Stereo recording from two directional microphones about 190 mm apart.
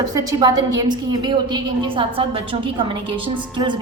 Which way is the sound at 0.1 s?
20° right (ahead or behind).